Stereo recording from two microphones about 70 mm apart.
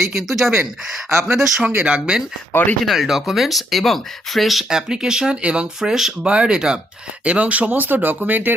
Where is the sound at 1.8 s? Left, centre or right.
Centre.